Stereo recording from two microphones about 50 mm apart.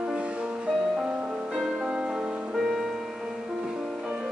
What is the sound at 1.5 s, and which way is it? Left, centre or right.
Music, centre.